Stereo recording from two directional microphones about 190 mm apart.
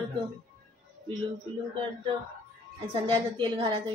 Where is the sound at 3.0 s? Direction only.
25° right (ahead or behind).